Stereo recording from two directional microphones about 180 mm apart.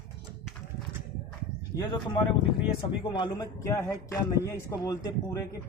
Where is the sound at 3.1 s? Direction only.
25° left (ahead or behind).